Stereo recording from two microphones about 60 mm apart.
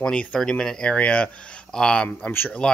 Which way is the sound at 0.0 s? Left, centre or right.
Centre.